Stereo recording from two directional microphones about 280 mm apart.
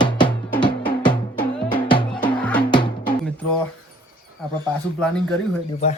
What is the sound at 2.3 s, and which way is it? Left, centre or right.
Music, centre.